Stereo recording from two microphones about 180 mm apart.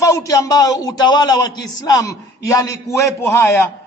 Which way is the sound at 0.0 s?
20° left (ahead or behind).